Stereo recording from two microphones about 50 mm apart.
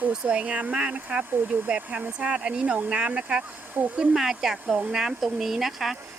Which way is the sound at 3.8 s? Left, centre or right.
Right.